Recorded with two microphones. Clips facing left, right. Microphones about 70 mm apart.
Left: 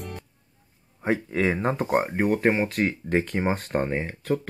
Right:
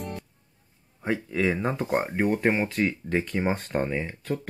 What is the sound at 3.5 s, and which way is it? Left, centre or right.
Speech, centre.